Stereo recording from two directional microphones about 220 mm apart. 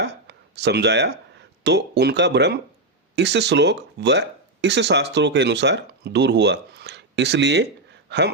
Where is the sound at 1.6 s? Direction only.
50° right (ahead or behind).